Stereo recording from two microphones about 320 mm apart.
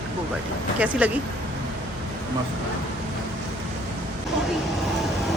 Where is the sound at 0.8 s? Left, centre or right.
Centre.